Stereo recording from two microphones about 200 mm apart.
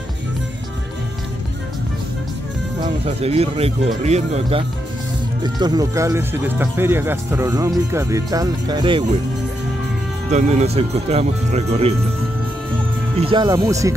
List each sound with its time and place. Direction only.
2.8 s speech: 30° right (ahead or behind)
10.3 s speech: 35° right (ahead or behind)
13.2 s speech: 25° right (ahead or behind)